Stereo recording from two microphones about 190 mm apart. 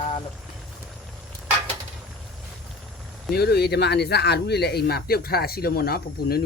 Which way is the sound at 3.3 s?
55° left (ahead or behind).